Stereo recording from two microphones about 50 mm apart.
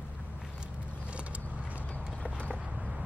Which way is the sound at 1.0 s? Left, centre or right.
Right.